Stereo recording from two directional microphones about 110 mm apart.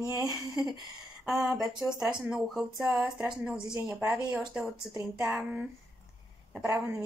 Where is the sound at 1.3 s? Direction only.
Centre (ahead or behind).